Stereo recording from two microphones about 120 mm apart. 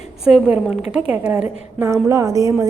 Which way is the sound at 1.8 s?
25° right (ahead or behind).